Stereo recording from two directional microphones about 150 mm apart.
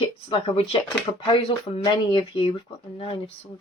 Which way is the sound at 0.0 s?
35° left (ahead or behind).